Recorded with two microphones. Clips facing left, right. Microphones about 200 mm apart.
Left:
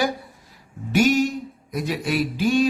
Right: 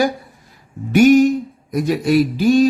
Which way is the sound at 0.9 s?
55° right (ahead or behind).